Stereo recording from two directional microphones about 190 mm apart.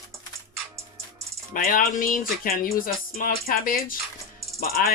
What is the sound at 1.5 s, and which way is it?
Speech, 45° left (ahead or behind).